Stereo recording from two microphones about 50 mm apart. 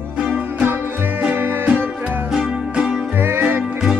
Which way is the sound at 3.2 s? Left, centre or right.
Right.